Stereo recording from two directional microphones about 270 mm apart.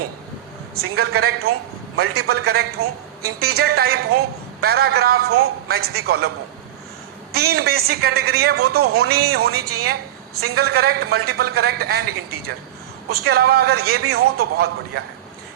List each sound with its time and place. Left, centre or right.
0.9 s a man's voice: right
7.3 s a man's voice: right
9.6 s a woman's voice: right
10.3 s a man's voice: right
13.1 s a man's voice: right